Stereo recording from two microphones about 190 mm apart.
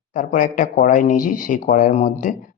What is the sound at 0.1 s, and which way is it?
Speech, 45° left (ahead or behind).